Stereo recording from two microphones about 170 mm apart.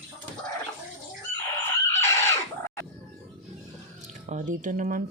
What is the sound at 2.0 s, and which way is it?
Chicken, 15° left (ahead or behind).